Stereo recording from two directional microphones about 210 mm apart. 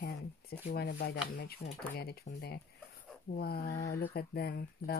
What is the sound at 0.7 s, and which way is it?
Speech, 50° left (ahead or behind).